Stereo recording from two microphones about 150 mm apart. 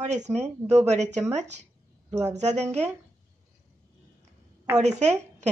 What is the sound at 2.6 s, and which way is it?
Speech, 10° left (ahead or behind).